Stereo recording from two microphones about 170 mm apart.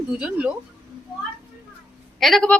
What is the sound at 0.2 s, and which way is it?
Speech, 10° right (ahead or behind).